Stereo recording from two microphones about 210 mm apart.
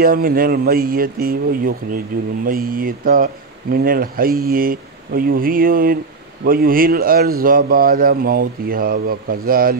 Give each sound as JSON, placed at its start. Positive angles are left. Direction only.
{"t": 0.0, "sound": "speech", "side_deg": -45}